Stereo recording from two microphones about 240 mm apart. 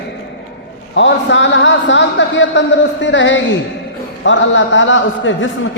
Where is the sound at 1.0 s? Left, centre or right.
Left.